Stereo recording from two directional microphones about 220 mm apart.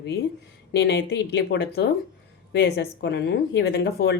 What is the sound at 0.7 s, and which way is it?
A woman's voice, 50° left (ahead or behind).